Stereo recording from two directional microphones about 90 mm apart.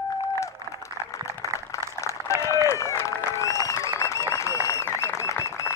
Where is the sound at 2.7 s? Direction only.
30° left (ahead or behind).